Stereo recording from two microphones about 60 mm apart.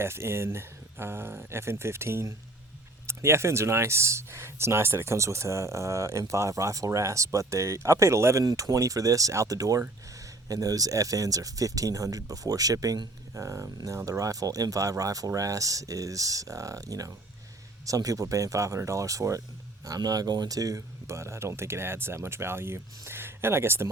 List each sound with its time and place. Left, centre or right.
0.0 s speech: right
8.4 s speech: right
19.8 s speech: right